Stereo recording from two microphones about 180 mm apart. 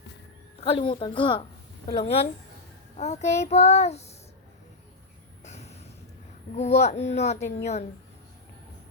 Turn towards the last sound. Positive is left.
turn(degrees=35)  # may be behind; listen again after turning